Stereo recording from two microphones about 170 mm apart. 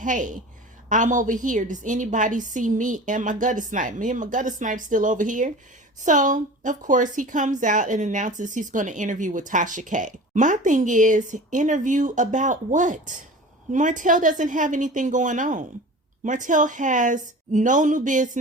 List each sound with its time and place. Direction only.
0.0 s a woman's voice: 50° right (ahead or behind)